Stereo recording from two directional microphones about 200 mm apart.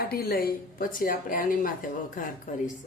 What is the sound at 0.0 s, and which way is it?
A woman's voice, 50° left (ahead or behind).